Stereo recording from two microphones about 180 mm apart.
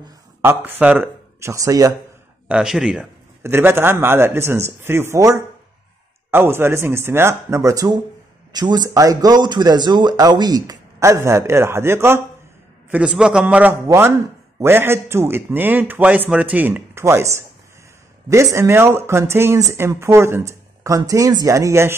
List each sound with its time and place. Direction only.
0.4 s speech: 10° right (ahead or behind)
2.4 s a man's voice: 5° right (ahead or behind)